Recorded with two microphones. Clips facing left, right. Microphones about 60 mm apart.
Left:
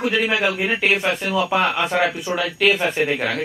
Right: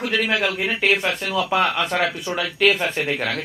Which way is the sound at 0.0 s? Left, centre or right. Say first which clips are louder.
Left 2 dB; centre.